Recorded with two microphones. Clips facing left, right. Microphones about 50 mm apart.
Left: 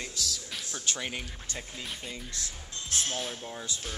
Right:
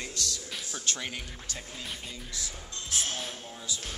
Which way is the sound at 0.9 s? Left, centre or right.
Centre.